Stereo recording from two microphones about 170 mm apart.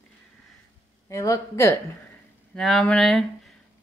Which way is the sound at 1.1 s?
20° left (ahead or behind).